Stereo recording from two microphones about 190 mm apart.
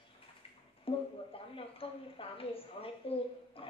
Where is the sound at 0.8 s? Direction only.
30° left (ahead or behind).